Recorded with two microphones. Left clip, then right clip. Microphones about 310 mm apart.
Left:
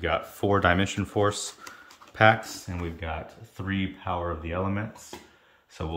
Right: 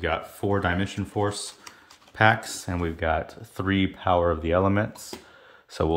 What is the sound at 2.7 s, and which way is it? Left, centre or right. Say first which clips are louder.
Speech: right 11 dB; centre.